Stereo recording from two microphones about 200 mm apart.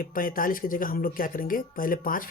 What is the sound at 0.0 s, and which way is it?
Speech, 45° left (ahead or behind).